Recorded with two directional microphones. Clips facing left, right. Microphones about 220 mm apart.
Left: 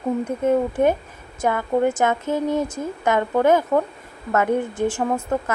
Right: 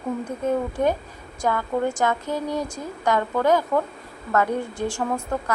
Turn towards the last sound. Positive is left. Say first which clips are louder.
# left 3 dB
turn(degrees=20)  # may be behind; listen again after turning